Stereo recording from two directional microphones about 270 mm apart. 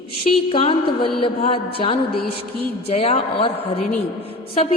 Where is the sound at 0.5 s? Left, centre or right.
Centre.